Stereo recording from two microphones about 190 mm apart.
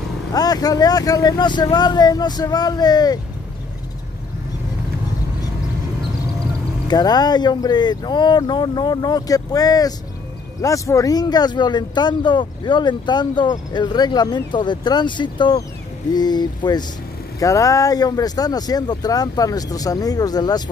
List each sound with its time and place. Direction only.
0.3 s speech: 20° left (ahead or behind)
6.9 s speech: 20° left (ahead or behind)